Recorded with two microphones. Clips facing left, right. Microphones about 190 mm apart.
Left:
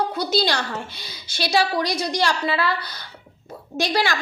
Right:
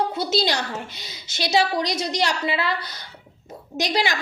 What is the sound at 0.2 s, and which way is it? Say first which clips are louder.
A woman's voice: left 1 dB; 25° right (ahead or behind).